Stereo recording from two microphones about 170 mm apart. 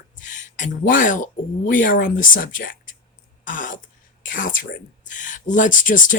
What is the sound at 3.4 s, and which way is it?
Throat clearing, 50° left (ahead or behind).